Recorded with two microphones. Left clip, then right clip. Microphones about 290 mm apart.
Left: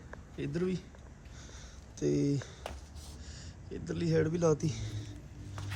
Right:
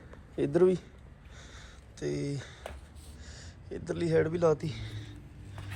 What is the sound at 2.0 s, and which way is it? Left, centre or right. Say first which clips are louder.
Speech: left 4 dB; centre.